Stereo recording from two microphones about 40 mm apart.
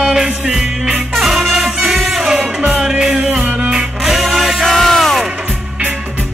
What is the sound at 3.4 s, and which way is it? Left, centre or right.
Music, right.